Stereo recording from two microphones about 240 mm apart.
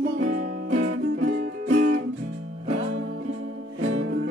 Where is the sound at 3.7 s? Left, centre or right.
Right.